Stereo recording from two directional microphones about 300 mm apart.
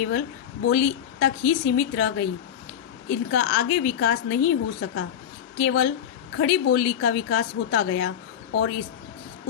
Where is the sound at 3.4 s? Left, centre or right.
Left.